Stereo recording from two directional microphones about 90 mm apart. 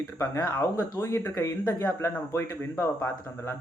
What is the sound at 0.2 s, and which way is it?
A man's voice, 35° left (ahead or behind).